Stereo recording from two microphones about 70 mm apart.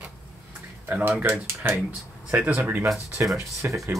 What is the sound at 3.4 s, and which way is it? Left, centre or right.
Speech, right.